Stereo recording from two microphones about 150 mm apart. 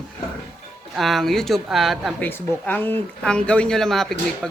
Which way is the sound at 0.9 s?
Centre (ahead or behind).